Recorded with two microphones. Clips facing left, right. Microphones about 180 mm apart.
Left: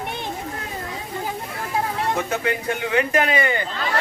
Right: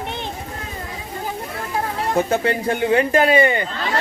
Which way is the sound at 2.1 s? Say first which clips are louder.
Right 5 dB; 35° right (ahead or behind).